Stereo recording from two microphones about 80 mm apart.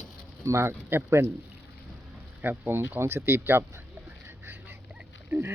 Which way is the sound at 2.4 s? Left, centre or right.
Right.